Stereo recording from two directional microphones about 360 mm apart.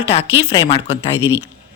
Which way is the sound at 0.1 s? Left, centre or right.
Centre.